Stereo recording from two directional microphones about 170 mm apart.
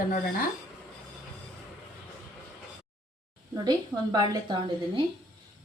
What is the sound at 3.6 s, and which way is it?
Speech, 25° right (ahead or behind).